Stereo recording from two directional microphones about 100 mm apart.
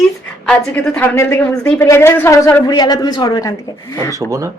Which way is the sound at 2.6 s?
45° left (ahead or behind).